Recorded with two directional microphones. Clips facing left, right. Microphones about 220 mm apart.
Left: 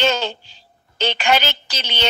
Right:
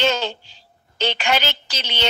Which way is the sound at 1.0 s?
50° left (ahead or behind).